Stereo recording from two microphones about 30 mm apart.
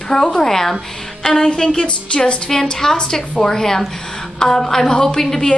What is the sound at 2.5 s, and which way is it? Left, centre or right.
Speech, centre.